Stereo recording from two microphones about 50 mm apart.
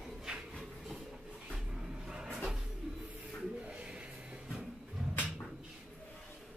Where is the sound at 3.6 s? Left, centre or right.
Right.